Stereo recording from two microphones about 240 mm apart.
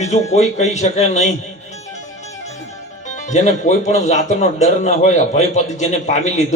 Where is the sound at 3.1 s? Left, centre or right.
Left.